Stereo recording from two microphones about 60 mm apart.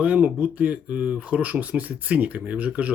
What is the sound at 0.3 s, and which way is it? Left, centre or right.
Speech, right.